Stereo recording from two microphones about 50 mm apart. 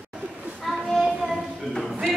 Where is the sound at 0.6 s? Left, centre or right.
Centre.